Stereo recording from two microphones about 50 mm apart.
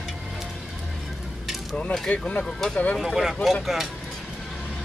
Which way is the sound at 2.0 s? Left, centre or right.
Left.